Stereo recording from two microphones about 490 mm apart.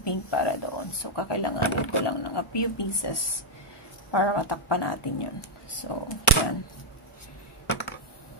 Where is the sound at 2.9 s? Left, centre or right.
Left.